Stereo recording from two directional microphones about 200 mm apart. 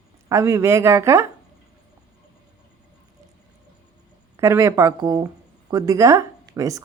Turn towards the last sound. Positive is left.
turn(degrees=-15)  # may be behind; listen again after turning